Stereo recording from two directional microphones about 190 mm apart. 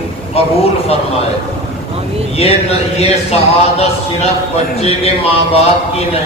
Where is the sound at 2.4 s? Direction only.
30° left (ahead or behind).